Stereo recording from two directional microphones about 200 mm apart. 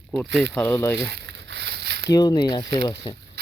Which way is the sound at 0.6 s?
10° left (ahead or behind).